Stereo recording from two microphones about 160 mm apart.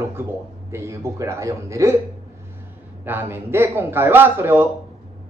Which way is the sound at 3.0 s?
10° right (ahead or behind).